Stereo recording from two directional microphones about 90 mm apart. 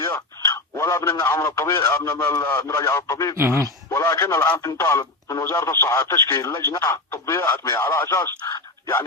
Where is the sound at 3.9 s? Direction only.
35° left (ahead or behind).